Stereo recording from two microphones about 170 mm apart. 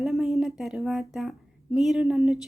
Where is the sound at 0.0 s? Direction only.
Centre (ahead or behind).